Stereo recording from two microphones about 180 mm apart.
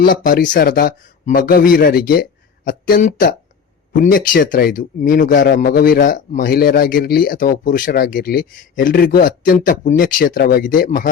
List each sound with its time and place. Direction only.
0.0 s a man's voice: 50° left (ahead or behind)